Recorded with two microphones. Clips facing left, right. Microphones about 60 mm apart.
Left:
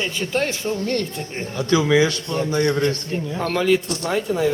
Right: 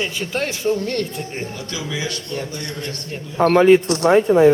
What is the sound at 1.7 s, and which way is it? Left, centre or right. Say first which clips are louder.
Speech: left 14 dB; left.